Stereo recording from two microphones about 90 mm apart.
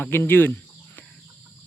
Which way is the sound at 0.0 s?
20° left (ahead or behind).